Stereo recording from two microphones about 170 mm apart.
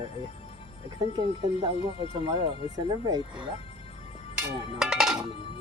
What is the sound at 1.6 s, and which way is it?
Speech, 25° right (ahead or behind).